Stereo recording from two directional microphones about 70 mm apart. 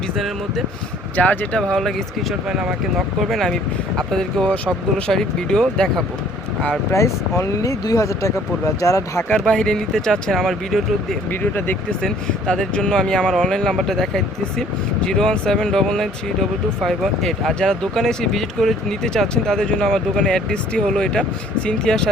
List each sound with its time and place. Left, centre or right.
1.1 s speech: left
1.5 s speech: centre
6.9 s speech: left
9.5 s speech: centre